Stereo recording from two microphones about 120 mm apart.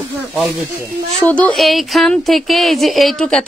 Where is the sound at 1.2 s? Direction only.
10° left (ahead or behind).